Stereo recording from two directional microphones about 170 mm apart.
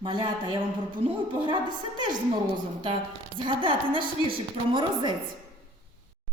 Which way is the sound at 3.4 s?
30° right (ahead or behind).